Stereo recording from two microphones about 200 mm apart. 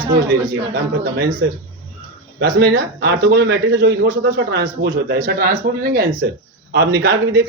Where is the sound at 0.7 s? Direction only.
50° right (ahead or behind).